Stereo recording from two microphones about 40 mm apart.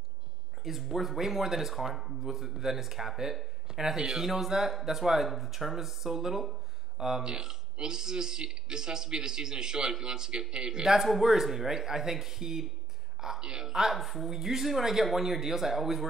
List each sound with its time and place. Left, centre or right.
0.7 s speech: centre